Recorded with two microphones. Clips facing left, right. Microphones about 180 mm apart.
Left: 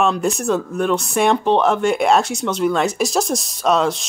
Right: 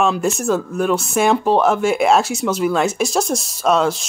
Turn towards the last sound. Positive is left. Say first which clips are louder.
# right 1 dB
turn(degrees=0)  # may be behind; listen again after turning